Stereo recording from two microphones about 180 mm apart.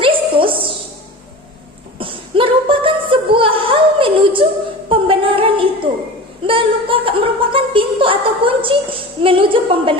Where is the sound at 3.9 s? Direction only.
30° right (ahead or behind).